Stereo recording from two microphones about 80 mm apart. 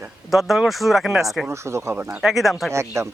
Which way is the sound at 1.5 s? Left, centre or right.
Right.